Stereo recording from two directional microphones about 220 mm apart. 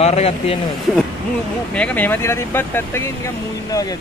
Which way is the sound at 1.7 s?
5° left (ahead or behind).